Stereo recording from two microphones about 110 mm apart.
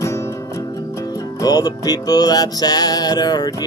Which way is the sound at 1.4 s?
35° left (ahead or behind).